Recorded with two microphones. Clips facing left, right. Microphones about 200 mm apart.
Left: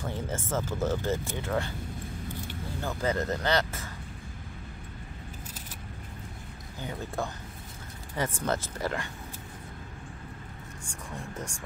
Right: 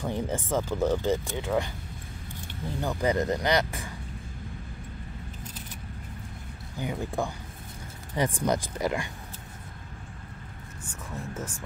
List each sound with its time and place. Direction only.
0.0 s speech: 15° right (ahead or behind)
2.8 s speech: 15° right (ahead or behind)
6.8 s speech: 15° right (ahead or behind)
10.9 s speech: 5° right (ahead or behind)